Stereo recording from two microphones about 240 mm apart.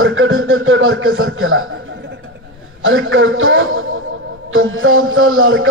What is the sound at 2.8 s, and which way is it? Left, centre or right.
A man's voice, right.